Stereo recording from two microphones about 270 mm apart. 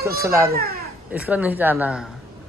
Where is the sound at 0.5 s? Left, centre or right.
Right.